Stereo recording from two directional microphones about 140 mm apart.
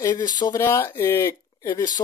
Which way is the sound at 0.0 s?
25° left (ahead or behind).